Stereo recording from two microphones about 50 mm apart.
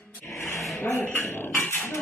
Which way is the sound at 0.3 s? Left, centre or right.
Left.